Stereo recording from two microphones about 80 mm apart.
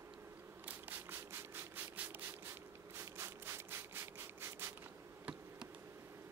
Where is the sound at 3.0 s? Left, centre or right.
Right.